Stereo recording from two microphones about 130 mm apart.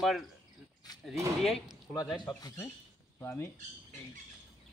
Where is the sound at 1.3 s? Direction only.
Centre (ahead or behind).